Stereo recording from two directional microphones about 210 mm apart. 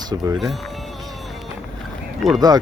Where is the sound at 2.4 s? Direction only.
20° right (ahead or behind).